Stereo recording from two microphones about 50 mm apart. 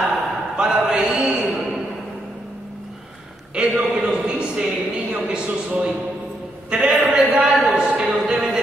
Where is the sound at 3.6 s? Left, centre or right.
Centre.